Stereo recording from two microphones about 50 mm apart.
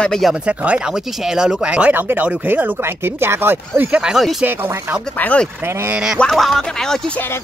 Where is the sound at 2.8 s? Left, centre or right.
Right.